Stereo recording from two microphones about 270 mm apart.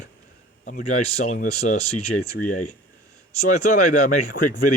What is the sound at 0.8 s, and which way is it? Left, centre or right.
Speech, left.